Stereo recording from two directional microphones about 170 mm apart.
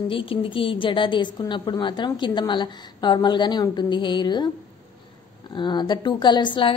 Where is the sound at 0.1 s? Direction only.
30° left (ahead or behind).